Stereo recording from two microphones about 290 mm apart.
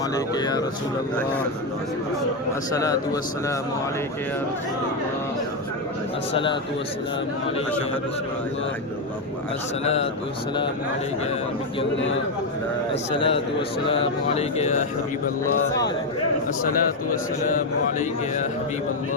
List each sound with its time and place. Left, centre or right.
0.3 s a man's voice: centre
2.7 s a man's voice: centre
6.3 s a man's voice: centre
9.8 s speech: left
11.9 s a man's voice: left
12.9 s speech: centre
17.1 s speech: left